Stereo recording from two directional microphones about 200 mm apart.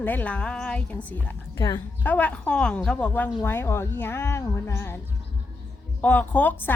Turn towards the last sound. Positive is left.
turn(degrees=10)  # may be behind; listen again after turning